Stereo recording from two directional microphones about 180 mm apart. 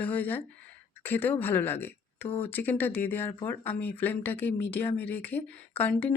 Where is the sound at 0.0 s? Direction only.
10° left (ahead or behind).